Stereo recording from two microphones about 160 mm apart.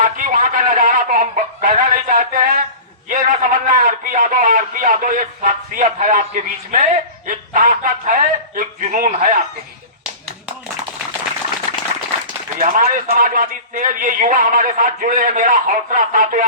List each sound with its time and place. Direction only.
0.0 s fowl: 55° right (ahead or behind)
3.1 s a man's voice: 55° right (ahead or behind)
7.3 s a sound: 55° right (ahead or behind)
12.5 s a man's voice: 55° right (ahead or behind)